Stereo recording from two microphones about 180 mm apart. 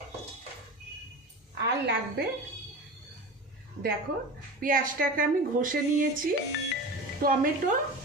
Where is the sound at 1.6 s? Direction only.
70° right (ahead or behind).